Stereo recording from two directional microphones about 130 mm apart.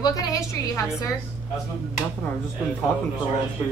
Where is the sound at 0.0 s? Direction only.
25° left (ahead or behind).